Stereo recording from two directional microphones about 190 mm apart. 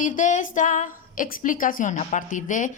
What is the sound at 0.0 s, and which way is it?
A woman's voice, 40° left (ahead or behind).